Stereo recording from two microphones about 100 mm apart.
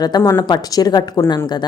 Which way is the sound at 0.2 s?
30° left (ahead or behind).